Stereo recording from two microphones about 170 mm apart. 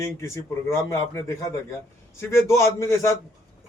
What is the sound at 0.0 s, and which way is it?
A man's voice, 15° left (ahead or behind).